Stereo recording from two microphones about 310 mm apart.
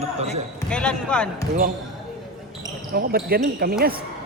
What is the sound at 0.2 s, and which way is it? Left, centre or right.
Speech, right.